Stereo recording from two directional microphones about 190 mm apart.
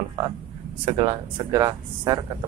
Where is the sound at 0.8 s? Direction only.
25° right (ahead or behind).